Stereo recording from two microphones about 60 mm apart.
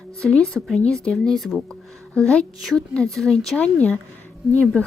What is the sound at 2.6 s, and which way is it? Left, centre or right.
Speech, centre.